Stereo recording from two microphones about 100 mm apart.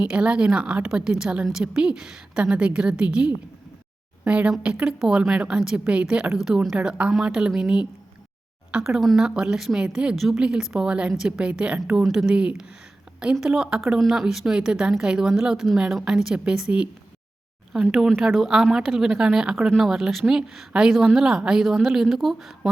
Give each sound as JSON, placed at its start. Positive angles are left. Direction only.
{"t": 0.1, "sound": "a woman's voice", "side_deg": -10}
{"t": 17.8, "sound": "a woman's voice", "side_deg": 5}